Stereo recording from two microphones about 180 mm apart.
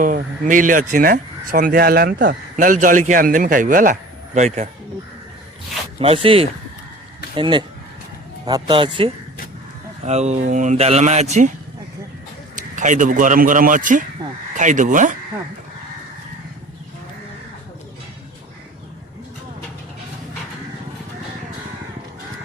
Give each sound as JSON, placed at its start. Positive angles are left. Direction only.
{"t": 0.4, "sound": "speech", "side_deg": -45}
{"t": 4.4, "sound": "speech", "side_deg": -35}
{"t": 6.0, "sound": "speech", "side_deg": -30}
{"t": 10.1, "sound": "speech", "side_deg": -40}
{"t": 12.5, "sound": "speech", "side_deg": -45}